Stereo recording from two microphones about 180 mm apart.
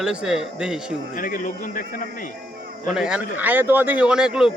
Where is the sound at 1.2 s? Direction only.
45° left (ahead or behind).